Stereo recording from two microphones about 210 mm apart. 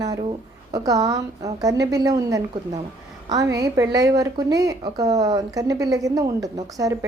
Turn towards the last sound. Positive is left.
turn(degrees=-15)  # may be behind; listen again after turning